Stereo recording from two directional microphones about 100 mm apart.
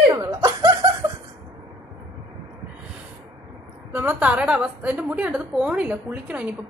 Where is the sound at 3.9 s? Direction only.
20° right (ahead or behind).